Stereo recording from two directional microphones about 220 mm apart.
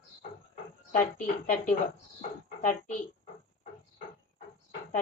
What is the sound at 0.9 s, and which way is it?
Speech, 35° left (ahead or behind).